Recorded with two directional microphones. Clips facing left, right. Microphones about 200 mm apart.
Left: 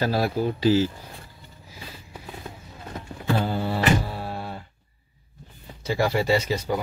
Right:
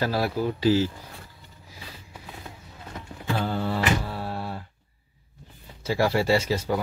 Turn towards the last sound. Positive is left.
turn(degrees=-5)  # may be behind; listen again after turning